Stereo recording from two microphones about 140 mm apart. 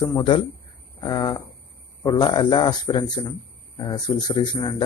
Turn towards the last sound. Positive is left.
turn(degrees=35)  # may be behind; listen again after turning